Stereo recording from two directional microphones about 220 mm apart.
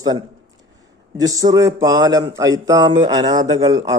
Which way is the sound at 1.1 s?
15° right (ahead or behind).